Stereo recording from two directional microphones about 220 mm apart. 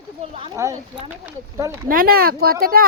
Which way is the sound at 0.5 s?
15° right (ahead or behind).